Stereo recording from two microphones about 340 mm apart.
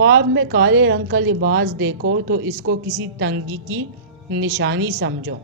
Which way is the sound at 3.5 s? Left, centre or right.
Right.